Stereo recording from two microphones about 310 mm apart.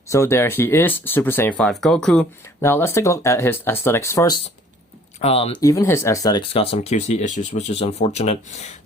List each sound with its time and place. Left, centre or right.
0.1 s speech: centre